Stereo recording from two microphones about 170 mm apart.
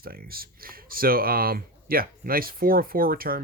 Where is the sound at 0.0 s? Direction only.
60° right (ahead or behind).